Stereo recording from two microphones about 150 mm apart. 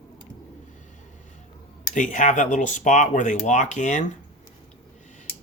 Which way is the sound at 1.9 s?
55° left (ahead or behind).